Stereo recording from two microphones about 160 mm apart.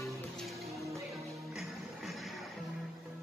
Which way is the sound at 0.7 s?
20° right (ahead or behind).